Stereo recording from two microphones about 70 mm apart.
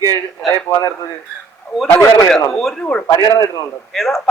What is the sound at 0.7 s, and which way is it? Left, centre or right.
Speech, left.